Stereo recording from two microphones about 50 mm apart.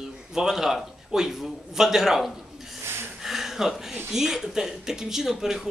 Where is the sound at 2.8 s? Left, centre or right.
Right.